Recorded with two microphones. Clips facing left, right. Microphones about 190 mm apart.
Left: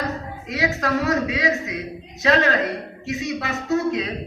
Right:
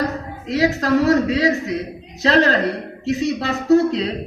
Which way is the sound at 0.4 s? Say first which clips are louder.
Right 5 dB; 35° right (ahead or behind).